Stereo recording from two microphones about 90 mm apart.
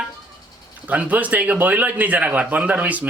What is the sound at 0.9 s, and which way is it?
A man's voice, 15° right (ahead or behind).